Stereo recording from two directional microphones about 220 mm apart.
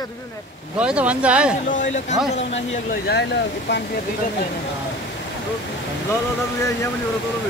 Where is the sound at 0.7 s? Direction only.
5° right (ahead or behind).